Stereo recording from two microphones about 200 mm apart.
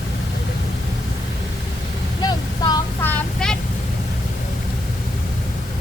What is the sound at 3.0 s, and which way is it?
Vehicle, 5° left (ahead or behind).